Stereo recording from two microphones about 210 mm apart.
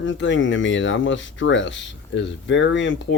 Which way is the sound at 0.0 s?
60° left (ahead or behind).